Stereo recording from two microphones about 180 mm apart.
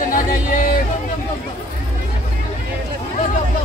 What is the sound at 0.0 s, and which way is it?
Music, 50° left (ahead or behind).